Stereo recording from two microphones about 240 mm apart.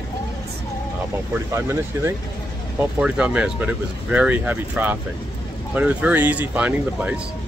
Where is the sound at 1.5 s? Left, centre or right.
Centre.